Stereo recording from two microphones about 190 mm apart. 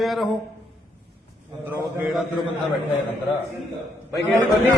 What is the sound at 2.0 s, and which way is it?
Speech, 5° right (ahead or behind).